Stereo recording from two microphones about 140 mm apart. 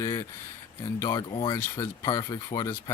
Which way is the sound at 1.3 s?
35° left (ahead or behind).